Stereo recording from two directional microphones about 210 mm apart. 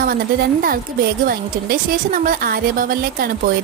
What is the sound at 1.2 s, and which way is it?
Speech, 45° right (ahead or behind).